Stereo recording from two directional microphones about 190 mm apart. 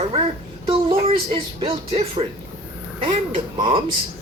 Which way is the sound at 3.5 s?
25° right (ahead or behind).